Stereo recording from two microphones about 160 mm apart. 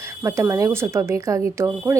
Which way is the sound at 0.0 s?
15° right (ahead or behind).